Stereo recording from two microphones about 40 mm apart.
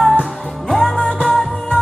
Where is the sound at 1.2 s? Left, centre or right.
Centre.